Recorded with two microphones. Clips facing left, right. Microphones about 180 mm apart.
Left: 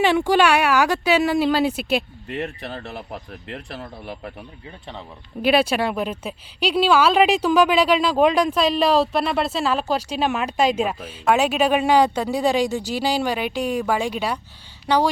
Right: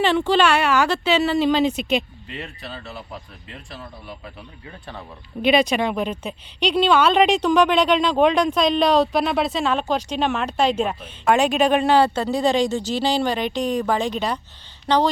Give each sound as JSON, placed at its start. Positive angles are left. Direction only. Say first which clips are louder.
{"t": 0.0, "sound": "a woman's voice", "louder": "left 1 dB", "side_deg": 10}
{"t": 2.2, "sound": "speech", "louder": "left 6 dB", "side_deg": 50}
{"t": 5.4, "sound": "a woman's voice", "louder": "right 1 dB", "side_deg": 5}